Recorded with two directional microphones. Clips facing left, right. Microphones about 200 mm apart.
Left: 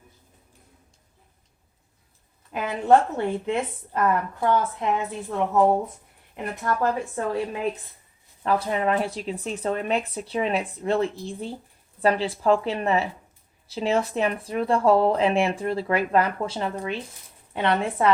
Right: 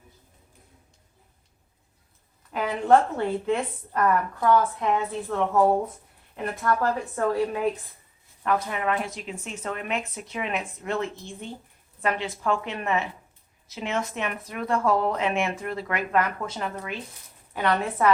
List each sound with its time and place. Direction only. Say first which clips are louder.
2.5 s a woman's voice: left 1 dB; 20° left (ahead or behind)
8.4 s a woman's voice: left 3 dB; 30° left (ahead or behind)